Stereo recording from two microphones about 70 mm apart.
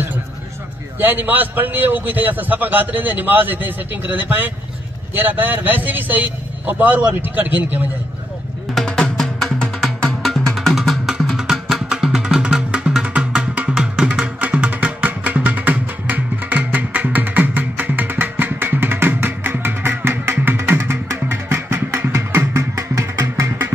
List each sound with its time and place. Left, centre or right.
0.9 s a man's voice: right
8.7 s music: centre; by 23.2 s right